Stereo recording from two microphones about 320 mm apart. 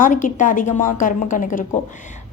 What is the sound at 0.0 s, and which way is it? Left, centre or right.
Speech, left.